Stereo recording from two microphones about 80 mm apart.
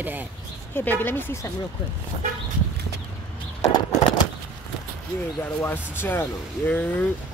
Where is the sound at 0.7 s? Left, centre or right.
Left.